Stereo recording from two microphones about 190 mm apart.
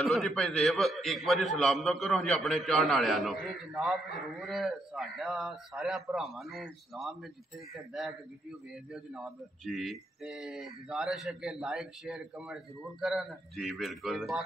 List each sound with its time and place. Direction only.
0.0 s speech: centre (ahead or behind)